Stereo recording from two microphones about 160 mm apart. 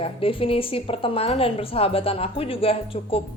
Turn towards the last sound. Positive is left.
turn(degrees=35)  # may be behind; listen again after turning